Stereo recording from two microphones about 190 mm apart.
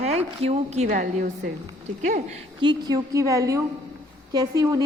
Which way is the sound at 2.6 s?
20° right (ahead or behind).